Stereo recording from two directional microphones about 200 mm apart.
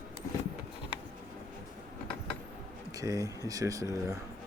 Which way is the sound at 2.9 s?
15° right (ahead or behind).